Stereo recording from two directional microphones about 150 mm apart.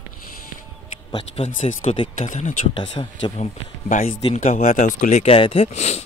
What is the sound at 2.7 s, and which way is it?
Speech, 30° left (ahead or behind).